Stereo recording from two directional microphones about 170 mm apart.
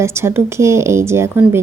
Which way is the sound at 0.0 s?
15° right (ahead or behind).